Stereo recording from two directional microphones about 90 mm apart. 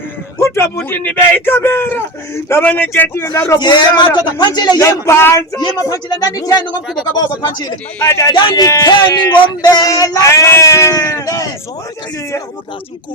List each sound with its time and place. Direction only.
0.4 s a sound: 30° left (ahead or behind)
0.9 s a man's voice: 20° left (ahead or behind)
3.6 s speech: 55° left (ahead or behind)
4.8 s speech: 35° left (ahead or behind)
5.5 s speech: 40° left (ahead or behind)
7.9 s speech: 35° left (ahead or behind)
8.9 s speech: 55° left (ahead or behind); by 11.4 s 40° left (ahead or behind)